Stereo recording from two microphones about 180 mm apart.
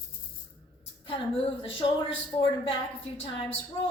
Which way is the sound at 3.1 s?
30° left (ahead or behind).